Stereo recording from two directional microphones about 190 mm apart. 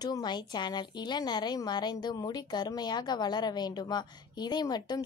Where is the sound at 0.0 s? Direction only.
20° left (ahead or behind).